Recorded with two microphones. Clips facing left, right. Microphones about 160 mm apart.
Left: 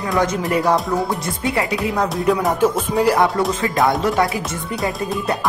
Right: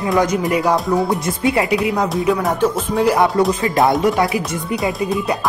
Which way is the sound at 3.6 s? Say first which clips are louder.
Right 2 dB; 20° right (ahead or behind).